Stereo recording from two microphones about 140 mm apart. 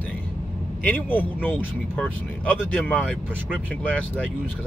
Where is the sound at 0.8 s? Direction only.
15° left (ahead or behind).